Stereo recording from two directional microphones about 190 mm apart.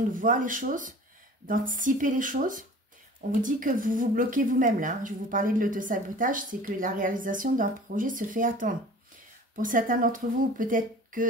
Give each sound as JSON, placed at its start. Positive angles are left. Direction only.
{"t": 0.1, "sound": "a woman's voice", "side_deg": -45}